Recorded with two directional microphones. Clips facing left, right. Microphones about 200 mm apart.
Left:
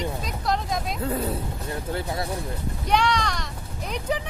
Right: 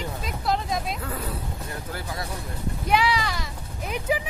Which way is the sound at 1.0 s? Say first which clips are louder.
Left 6 dB; 25° left (ahead or behind).